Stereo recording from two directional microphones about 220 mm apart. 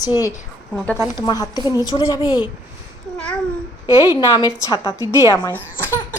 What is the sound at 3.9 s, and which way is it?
A woman's voice, 15° left (ahead or behind).